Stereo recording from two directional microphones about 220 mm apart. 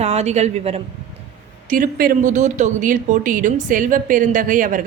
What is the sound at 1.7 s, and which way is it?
Speech, 40° right (ahead or behind).